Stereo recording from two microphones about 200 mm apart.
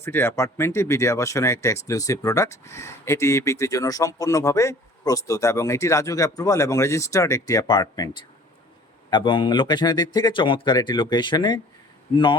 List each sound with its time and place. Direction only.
0.0 s a man's voice: 10° left (ahead or behind)